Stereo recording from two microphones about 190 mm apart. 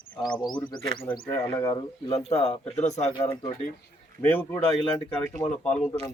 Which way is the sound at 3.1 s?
15° left (ahead or behind).